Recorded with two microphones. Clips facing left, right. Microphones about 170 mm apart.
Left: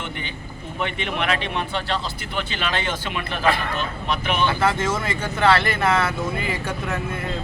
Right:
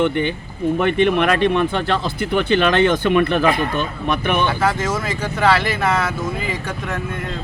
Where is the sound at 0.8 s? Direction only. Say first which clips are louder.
Right 9 dB; 50° right (ahead or behind).